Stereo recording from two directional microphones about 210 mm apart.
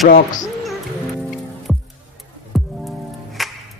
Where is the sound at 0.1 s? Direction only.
35° left (ahead or behind).